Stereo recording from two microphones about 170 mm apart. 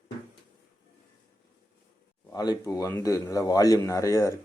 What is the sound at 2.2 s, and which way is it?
Speech, 20° left (ahead or behind).